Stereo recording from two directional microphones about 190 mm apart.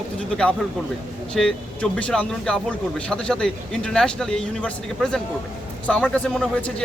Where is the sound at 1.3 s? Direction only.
5° left (ahead or behind).